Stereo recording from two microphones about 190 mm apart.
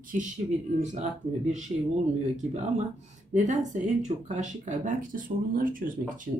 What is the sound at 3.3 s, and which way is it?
A woman's voice, 40° right (ahead or behind).